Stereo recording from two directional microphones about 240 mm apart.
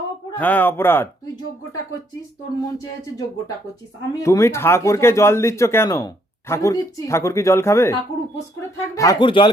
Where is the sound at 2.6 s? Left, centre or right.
Centre.